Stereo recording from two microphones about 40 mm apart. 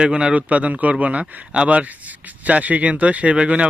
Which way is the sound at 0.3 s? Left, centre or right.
Right.